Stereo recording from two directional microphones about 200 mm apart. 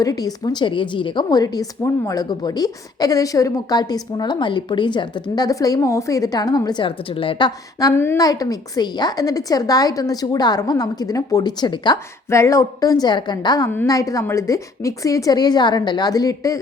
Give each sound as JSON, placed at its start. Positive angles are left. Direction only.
{"t": 0.0, "sound": "a woman's voice", "side_deg": 20}